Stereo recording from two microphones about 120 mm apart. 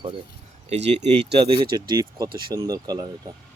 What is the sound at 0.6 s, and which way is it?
Speech, 65° right (ahead or behind).